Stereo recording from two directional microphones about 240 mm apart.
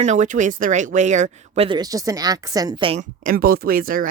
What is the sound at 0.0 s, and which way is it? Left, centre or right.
Speech, right.